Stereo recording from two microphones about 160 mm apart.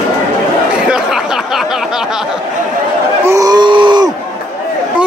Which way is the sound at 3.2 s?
20° right (ahead or behind).